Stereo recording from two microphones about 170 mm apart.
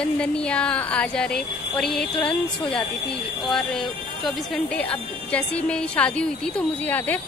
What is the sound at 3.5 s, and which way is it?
Speech, centre (ahead or behind).